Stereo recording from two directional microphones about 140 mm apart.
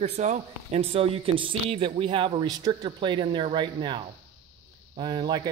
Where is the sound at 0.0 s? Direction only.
55° right (ahead or behind).